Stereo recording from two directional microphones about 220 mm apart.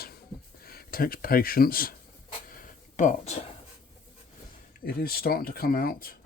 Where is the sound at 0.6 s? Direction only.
40° left (ahead or behind).